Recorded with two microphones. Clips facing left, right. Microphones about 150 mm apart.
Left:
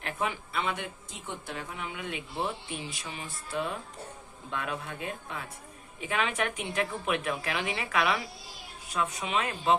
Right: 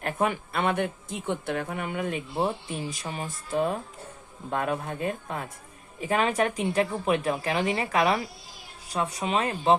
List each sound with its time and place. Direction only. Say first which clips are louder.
0.0 s a woman's voice: right 6 dB; 50° right (ahead or behind)